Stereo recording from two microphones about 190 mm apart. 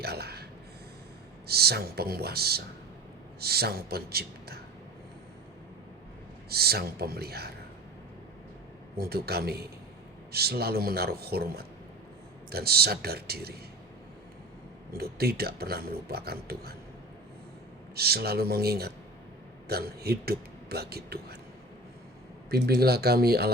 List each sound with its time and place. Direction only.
0.0 s a sound: 55° right (ahead or behind)
1.5 s speech: 55° right (ahead or behind)
6.5 s speech: 55° right (ahead or behind)
9.0 s speech: 55° right (ahead or behind)
14.9 s speech: 55° right (ahead or behind)
17.9 s speech: 55° right (ahead or behind)
22.4 s speech: 55° right (ahead or behind)